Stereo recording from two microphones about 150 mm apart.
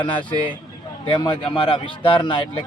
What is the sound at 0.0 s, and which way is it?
Speech, 35° left (ahead or behind).